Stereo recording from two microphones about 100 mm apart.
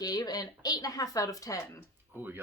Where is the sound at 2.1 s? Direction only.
20° right (ahead or behind).